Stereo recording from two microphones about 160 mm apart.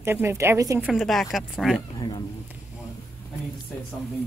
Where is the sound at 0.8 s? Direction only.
Centre (ahead or behind).